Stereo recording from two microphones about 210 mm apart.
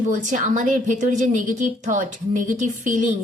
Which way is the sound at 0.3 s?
35° right (ahead or behind).